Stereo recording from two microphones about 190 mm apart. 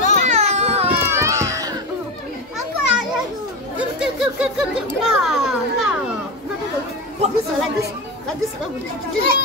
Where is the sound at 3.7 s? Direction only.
5° right (ahead or behind).